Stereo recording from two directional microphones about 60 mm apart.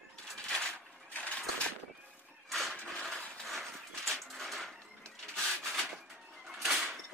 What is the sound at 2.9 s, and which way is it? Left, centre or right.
Horse, centre.